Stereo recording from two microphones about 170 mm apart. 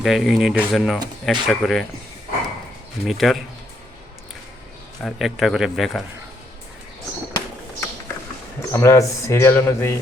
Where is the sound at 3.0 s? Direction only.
Centre (ahead or behind).